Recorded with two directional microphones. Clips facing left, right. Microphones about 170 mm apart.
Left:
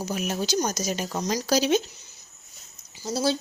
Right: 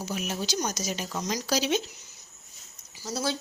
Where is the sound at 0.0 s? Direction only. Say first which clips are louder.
Left 4 dB; 45° left (ahead or behind).